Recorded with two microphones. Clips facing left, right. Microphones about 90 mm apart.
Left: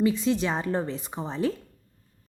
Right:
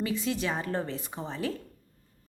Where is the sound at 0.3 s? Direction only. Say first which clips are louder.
Left 5 dB; 25° left (ahead or behind).